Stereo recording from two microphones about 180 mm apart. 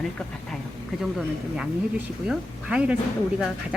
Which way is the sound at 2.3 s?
5° right (ahead or behind).